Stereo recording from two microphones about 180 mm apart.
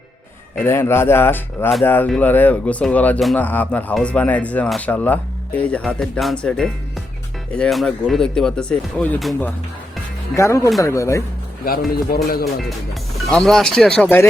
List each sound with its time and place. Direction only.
0.6 s speech: 15° left (ahead or behind)
10.3 s speech: 15° left (ahead or behind)
12.1 s speech: 55° left (ahead or behind)
12.6 s speech: centre (ahead or behind)